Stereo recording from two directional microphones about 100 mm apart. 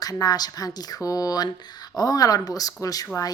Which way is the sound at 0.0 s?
40° left (ahead or behind).